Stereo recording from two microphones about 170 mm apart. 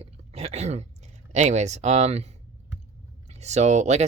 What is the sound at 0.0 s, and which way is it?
Throat clearing, 35° right (ahead or behind).